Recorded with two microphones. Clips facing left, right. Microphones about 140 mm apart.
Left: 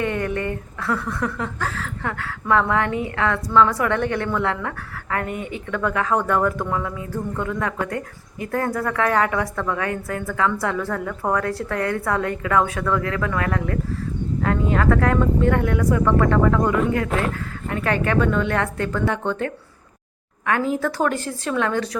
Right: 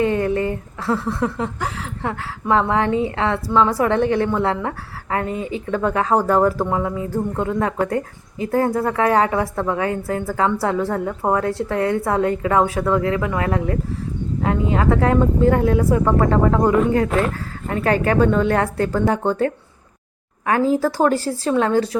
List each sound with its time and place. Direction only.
0.0 s a woman's voice: 25° right (ahead or behind)